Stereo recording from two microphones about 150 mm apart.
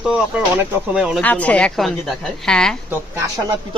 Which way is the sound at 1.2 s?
10° left (ahead or behind).